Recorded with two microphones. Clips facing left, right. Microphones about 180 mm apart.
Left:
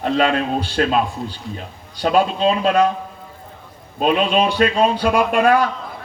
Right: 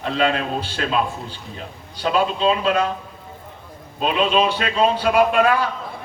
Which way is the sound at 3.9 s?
45° left (ahead or behind).